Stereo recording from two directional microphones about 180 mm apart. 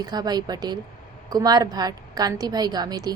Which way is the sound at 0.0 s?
20° right (ahead or behind).